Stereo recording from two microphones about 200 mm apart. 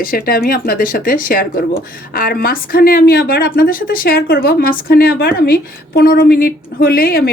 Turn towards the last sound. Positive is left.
turn(degrees=50)  # may be behind; listen again after turning